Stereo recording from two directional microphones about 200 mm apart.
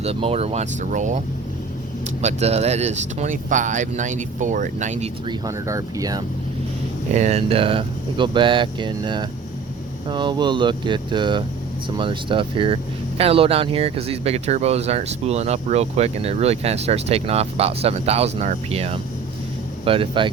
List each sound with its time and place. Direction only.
0.0 s speech: 30° right (ahead or behind)
2.2 s speech: 30° right (ahead or behind)
5.3 s speech: 15° right (ahead or behind)
7.1 s speech: 35° right (ahead or behind)